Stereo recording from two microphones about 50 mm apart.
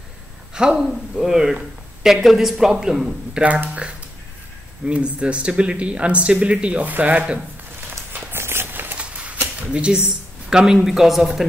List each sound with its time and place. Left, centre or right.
0.6 s a woman's voice: centre
3.3 s speech: centre
4.8 s speech: right
8.1 s a sound: right
8.9 s a sound: right
10.0 s speech: centre